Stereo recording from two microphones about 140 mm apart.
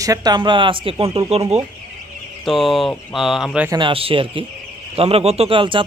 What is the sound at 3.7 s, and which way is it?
Speech, 35° right (ahead or behind).